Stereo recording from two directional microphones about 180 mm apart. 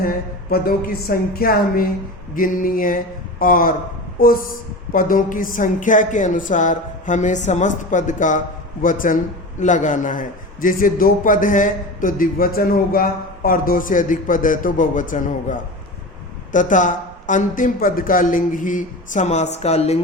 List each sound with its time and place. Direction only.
0.5 s a woman's voice: 55° left (ahead or behind); by 20.0 s 35° left (ahead or behind)